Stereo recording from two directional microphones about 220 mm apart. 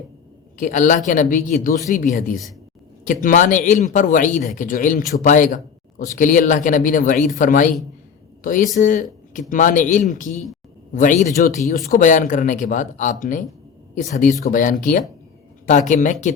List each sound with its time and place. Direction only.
0.6 s speech: 35° left (ahead or behind)
8.8 s speech: 35° left (ahead or behind)